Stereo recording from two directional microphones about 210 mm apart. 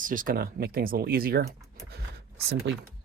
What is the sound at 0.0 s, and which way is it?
Speech, 40° right (ahead or behind).